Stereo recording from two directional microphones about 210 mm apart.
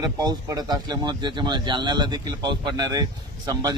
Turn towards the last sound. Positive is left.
turn(degrees=-20)  # may be behind; listen again after turning